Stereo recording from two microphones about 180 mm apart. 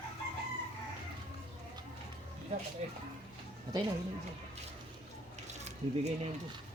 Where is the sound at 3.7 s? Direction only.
20° right (ahead or behind).